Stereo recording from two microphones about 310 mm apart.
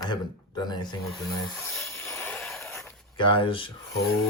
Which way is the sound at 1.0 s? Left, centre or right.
Centre.